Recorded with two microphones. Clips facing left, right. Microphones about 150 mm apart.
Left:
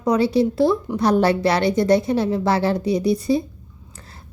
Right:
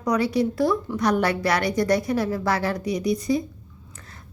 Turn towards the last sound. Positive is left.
turn(degrees=30)  # may be behind; listen again after turning